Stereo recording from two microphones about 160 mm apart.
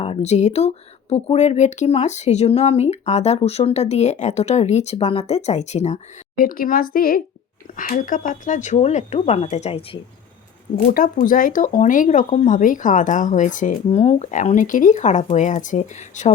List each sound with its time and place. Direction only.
0.0 s speech: 40° left (ahead or behind)
10.9 s speech: 60° left (ahead or behind)